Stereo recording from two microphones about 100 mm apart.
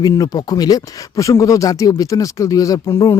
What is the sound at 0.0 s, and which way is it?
Speech, 40° left (ahead or behind).